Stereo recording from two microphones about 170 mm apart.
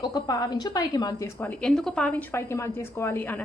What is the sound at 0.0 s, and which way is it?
A woman's voice, 20° left (ahead or behind).